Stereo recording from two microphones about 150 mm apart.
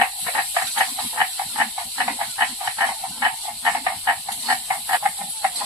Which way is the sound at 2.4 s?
15° right (ahead or behind).